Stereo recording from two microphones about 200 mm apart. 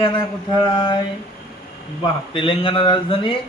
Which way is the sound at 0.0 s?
25° left (ahead or behind).